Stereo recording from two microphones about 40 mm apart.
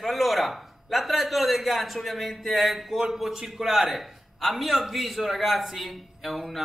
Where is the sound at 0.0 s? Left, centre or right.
Centre.